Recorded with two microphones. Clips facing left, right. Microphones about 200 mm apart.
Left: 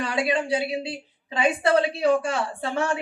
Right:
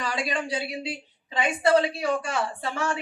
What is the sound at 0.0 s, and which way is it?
Speech, 60° left (ahead or behind).